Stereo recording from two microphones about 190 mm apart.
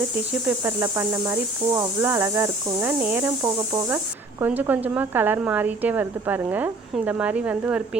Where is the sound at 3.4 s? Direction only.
20° right (ahead or behind).